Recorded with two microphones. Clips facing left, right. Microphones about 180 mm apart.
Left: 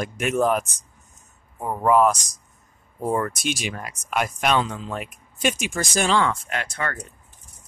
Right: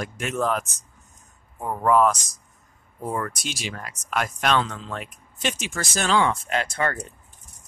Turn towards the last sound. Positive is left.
turn(degrees=-30)  # may be behind; listen again after turning